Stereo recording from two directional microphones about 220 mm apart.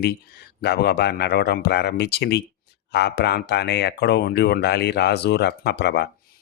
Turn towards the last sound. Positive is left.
turn(degrees=50)  # may be behind; listen again after turning